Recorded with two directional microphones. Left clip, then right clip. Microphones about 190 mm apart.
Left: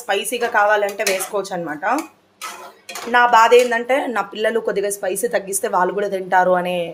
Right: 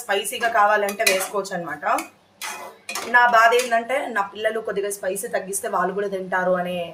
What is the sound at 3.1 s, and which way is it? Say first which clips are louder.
A woman's voice: left 4 dB; 40° left (ahead or behind).